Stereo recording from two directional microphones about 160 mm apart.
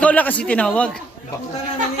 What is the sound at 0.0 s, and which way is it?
Speech, 10° left (ahead or behind).